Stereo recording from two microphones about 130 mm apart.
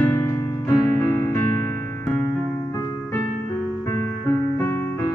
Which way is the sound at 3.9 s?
20° left (ahead or behind).